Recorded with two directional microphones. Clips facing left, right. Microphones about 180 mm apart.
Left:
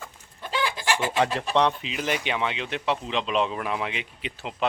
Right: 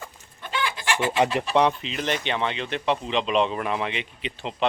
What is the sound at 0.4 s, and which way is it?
Chicken, 35° left (ahead or behind).